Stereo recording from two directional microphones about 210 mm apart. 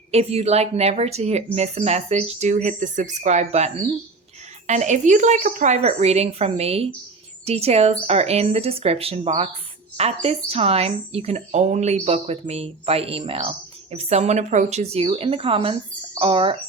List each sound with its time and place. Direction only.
0.1 s a woman's voice: 30° right (ahead or behind)